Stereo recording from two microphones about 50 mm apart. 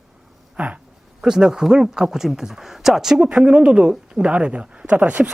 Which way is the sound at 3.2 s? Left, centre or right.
Right.